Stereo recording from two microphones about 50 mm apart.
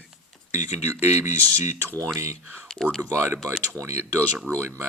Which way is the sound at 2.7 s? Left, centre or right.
Centre.